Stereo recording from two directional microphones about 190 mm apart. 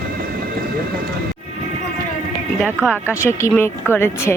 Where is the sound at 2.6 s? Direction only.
5° right (ahead or behind).